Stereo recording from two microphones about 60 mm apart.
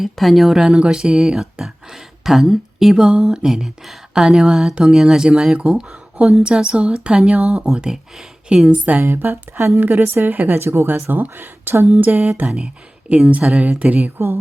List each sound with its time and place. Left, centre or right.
0.0 s a woman's voice: centre; by 9.0 s right
9.0 s speech: right
10.0 s speech: right
10.6 s a woman's voice: right
12.5 s a woman's voice: centre